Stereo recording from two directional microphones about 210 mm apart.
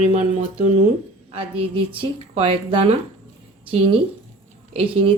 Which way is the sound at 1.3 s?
25° right (ahead or behind).